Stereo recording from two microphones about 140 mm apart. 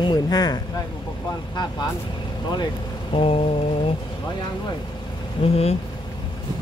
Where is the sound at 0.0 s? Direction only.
30° left (ahead or behind).